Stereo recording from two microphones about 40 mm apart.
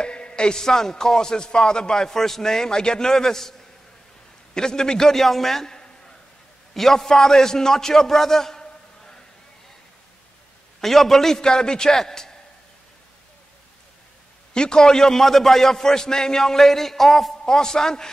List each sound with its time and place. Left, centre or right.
0.0 s speech: left
4.6 s a man's voice: centre
6.7 s a man's voice: centre
10.8 s speech: centre
14.5 s speech: centre